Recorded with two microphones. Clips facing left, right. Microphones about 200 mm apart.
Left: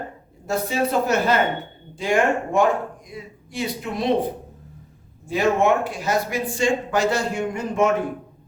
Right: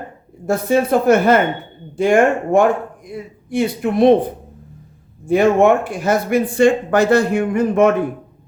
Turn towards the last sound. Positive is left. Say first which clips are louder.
# right 7 dB
turn(degrees=-60)  # may be behind; listen again after turning